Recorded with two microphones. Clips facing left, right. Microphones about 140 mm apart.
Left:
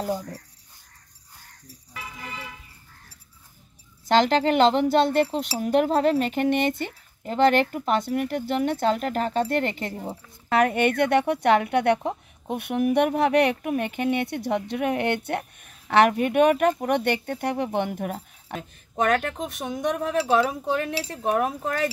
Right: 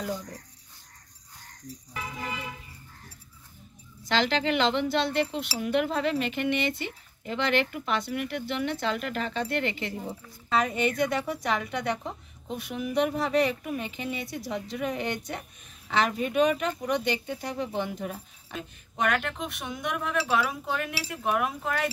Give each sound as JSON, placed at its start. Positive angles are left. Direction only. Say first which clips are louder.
{"t": 4.1, "sound": "speech", "louder": "left 6 dB", "side_deg": 45}
{"t": 10.5, "sound": "a woman's voice", "louder": "left 5 dB", "side_deg": 65}